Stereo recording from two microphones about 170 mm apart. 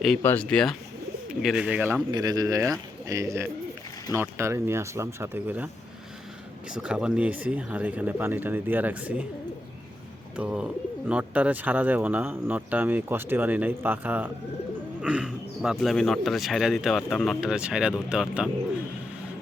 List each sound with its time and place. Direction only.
0.2 s speech: 10° left (ahead or behind); by 5.6 s 10° right (ahead or behind)
6.7 s speech: 5° right (ahead or behind)
10.3 s speech: 5° right (ahead or behind)